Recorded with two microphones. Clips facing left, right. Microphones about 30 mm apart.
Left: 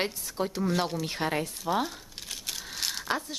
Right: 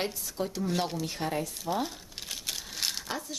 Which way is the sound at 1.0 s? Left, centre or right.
Left.